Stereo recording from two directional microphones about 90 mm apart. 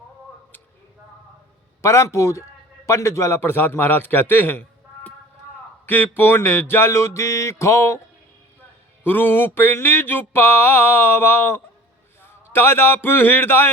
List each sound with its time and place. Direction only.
1.8 s a man's voice: 35° left (ahead or behind)
3.4 s mantra: 20° left (ahead or behind)
5.9 s mantra: 20° left (ahead or behind)
9.0 s mantra: 20° left (ahead or behind)
12.2 s a sound: 25° left (ahead or behind)